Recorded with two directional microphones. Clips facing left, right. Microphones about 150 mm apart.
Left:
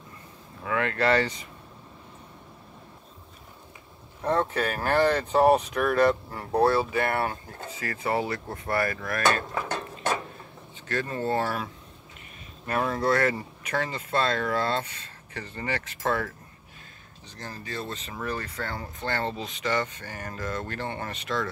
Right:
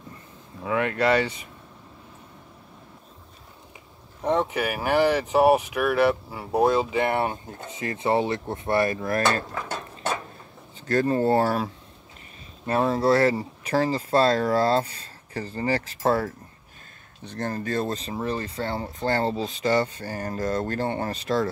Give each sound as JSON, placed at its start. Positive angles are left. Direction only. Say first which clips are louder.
{"t": 0.7, "sound": "speech", "louder": "right 2 dB", "side_deg": -20}
{"t": 4.2, "sound": "speech", "louder": "right 2 dB", "side_deg": -15}
{"t": 6.6, "sound": "speech", "louder": "right 2 dB", "side_deg": -15}
{"t": 10.9, "sound": "speech", "louder": "right 7 dB", "side_deg": -40}
{"t": 17.2, "sound": "speech", "louder": "right 11 dB", "side_deg": -55}